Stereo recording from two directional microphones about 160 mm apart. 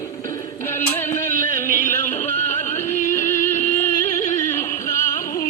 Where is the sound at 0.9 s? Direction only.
15° left (ahead or behind).